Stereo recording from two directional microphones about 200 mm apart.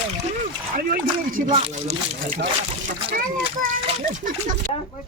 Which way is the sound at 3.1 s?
45° right (ahead or behind).